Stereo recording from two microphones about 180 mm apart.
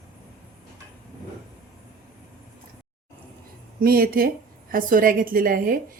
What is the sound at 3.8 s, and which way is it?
A woman's voice, 55° right (ahead or behind).